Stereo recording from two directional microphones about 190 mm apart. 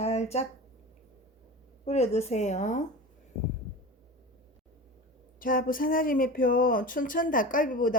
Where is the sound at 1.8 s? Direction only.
35° left (ahead or behind).